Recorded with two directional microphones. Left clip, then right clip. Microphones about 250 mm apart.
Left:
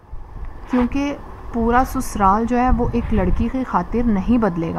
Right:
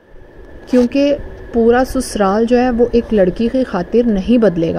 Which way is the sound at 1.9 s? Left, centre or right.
Right.